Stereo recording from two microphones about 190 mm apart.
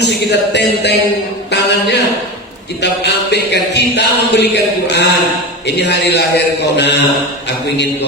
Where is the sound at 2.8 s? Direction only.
60° left (ahead or behind).